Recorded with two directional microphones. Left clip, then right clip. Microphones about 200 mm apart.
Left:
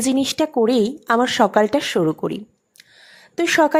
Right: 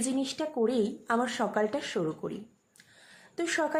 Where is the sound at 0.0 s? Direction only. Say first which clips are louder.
Left 12 dB; 40° left (ahead or behind).